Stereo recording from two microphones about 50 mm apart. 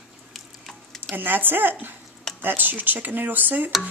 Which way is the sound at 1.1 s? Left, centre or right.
Right.